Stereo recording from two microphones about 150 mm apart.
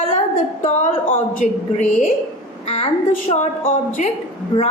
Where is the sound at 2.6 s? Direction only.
45° left (ahead or behind).